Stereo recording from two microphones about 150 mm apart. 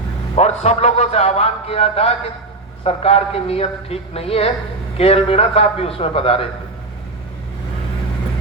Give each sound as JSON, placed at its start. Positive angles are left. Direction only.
{"t": 0.3, "sound": "a man's voice", "side_deg": 45}